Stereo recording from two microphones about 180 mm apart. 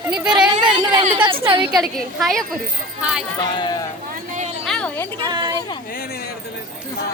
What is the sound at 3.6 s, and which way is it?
Speech, 20° left (ahead or behind).